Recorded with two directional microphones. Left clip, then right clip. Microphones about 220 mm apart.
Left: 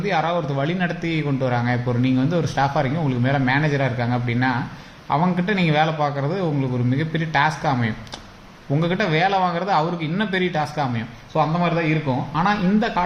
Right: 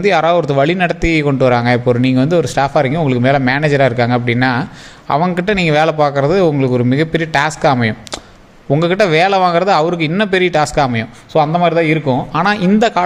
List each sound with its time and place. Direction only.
0.0 s a man's voice: 45° right (ahead or behind)